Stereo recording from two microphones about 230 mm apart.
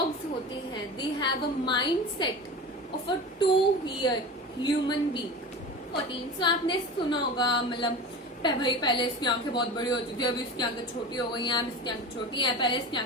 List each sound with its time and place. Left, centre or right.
0.7 s a woman's voice: left
3.4 s a woman's voice: left
6.4 s a woman's voice: centre